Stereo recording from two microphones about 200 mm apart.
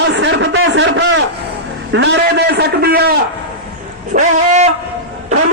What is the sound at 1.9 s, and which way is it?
A man's voice, 60° right (ahead or behind).